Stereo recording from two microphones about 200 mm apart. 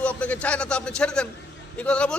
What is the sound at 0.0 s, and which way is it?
A man's voice, 5° left (ahead or behind).